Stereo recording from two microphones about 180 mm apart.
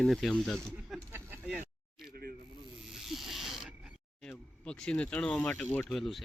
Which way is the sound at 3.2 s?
Centre (ahead or behind).